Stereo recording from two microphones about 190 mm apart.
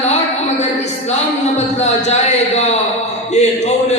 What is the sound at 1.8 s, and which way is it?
Speech, 35° left (ahead or behind).